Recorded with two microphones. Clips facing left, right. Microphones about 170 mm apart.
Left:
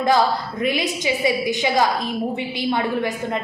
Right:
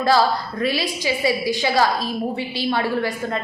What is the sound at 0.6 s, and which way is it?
A woman's voice, 20° left (ahead or behind).